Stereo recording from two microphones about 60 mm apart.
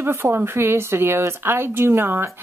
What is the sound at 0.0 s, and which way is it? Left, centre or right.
A woman's voice, right.